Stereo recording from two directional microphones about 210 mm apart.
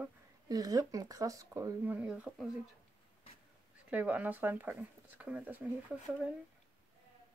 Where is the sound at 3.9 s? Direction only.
5° right (ahead or behind).